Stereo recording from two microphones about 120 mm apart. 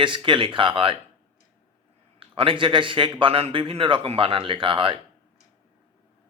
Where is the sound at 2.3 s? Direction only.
45° right (ahead or behind).